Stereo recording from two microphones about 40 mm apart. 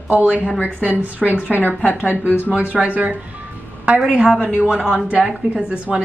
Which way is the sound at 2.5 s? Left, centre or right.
Right.